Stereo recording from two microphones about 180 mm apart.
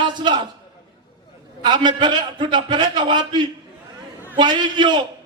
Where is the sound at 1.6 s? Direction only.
25° right (ahead or behind).